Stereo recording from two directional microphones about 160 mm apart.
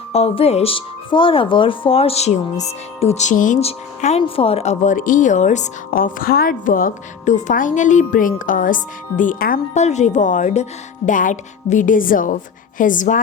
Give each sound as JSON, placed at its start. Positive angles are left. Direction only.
{"t": 0.1, "sound": "speech", "side_deg": 40}